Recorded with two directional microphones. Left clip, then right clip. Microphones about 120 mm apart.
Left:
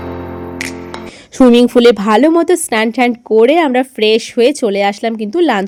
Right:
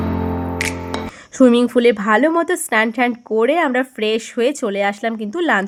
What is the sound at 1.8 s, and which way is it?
Speech, 45° left (ahead or behind).